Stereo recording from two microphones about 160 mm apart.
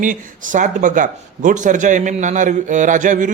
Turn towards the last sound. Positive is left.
turn(degrees=-50)  # may be behind; listen again after turning